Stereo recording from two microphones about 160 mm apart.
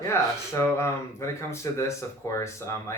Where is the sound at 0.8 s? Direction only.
15° left (ahead or behind).